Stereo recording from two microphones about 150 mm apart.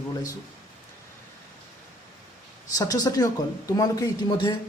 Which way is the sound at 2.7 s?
25° left (ahead or behind).